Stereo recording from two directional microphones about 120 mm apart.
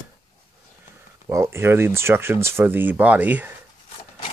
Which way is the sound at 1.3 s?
20° right (ahead or behind).